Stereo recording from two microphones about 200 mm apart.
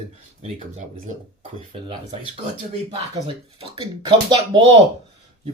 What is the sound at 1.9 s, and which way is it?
Speech, 30° right (ahead or behind).